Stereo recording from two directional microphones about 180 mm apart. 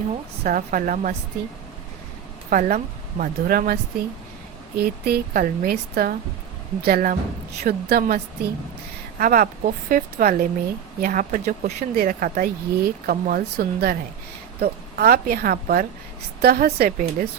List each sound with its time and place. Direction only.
0.4 s speech: 50° right (ahead or behind)
2.5 s speech: 50° right (ahead or behind)